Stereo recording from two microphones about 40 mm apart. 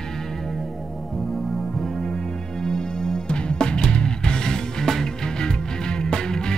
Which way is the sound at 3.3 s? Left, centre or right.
Left.